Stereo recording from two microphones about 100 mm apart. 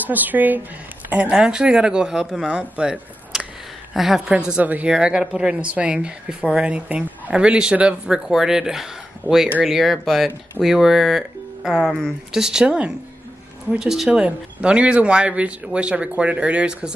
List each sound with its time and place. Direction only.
0.0 s a woman's voice: 20° right (ahead or behind)
9.3 s a woman's voice: 15° right (ahead or behind)
9.7 s a woman's voice: centre (ahead or behind)